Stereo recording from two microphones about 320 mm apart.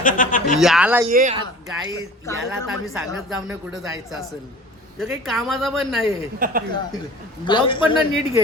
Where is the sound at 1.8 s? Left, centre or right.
Centre.